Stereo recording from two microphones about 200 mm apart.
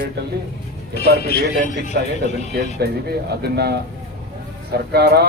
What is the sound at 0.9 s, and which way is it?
A man's voice, 50° left (ahead or behind).